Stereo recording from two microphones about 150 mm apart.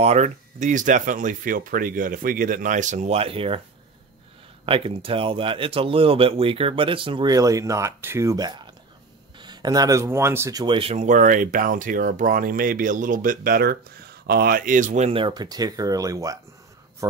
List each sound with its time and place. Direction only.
0.0 s speech: 45° right (ahead or behind)
4.6 s speech: 40° right (ahead or behind); by 10.6 s 20° right (ahead or behind)
10.6 s speech: 35° right (ahead or behind); by 13.7 s 75° right (ahead or behind)
14.2 s speech: 90° right; by 15.1 s 50° right (ahead or behind)
15.1 s speech: 30° right (ahead or behind)